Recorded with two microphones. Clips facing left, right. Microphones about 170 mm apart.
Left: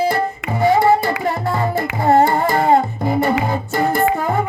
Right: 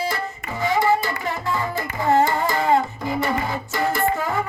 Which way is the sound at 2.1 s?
55° left (ahead or behind).